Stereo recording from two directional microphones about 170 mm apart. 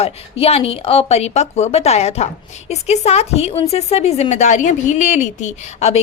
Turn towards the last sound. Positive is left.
turn(degrees=40)  # may be behind; listen again after turning